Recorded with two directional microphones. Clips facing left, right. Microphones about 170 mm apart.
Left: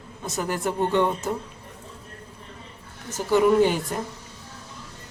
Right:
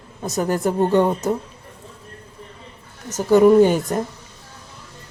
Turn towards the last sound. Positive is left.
turn(degrees=-45)  # may be behind; listen again after turning